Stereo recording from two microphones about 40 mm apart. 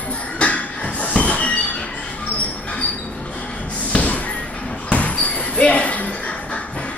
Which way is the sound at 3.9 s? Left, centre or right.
Left.